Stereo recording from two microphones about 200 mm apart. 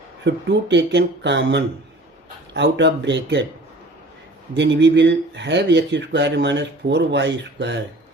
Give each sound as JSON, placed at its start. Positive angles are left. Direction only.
{"t": 0.3, "sound": "speech", "side_deg": -60}
{"t": 4.5, "sound": "speech", "side_deg": -65}